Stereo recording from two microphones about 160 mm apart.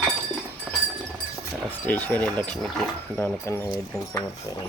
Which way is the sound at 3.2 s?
15° left (ahead or behind).